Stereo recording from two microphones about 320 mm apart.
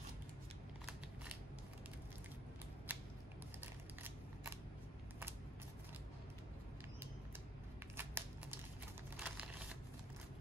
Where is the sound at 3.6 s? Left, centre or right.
Centre.